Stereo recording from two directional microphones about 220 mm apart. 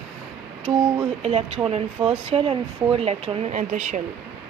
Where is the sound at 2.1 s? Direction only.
25° right (ahead or behind).